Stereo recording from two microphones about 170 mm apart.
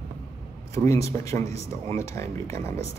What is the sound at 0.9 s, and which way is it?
Speech, 15° left (ahead or behind).